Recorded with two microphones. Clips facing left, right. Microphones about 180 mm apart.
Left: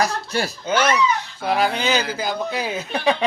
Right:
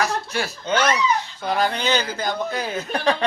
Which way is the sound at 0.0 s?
35° left (ahead or behind).